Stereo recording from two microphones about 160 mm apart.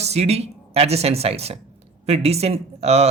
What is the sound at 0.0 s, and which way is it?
Speech, 40° right (ahead or behind).